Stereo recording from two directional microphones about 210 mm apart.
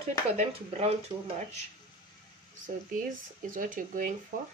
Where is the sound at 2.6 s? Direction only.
40° right (ahead or behind).